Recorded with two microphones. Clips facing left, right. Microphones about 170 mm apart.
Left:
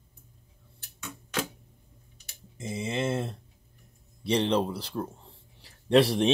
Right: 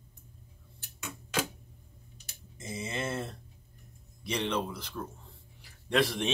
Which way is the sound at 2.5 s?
25° left (ahead or behind).